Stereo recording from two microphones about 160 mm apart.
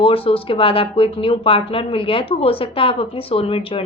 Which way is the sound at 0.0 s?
35° left (ahead or behind).